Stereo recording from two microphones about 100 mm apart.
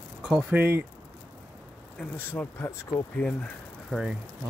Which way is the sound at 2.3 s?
25° left (ahead or behind).